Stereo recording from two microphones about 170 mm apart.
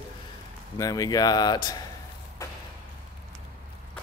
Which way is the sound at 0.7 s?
20° left (ahead or behind).